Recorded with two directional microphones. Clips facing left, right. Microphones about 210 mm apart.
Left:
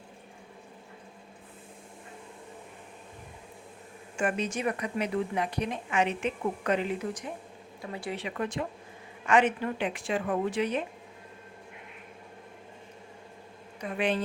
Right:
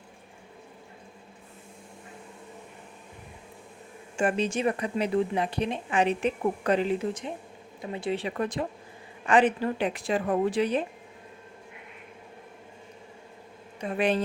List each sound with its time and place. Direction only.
4.2 s a woman's voice: 30° right (ahead or behind)
13.8 s a woman's voice: 35° right (ahead or behind)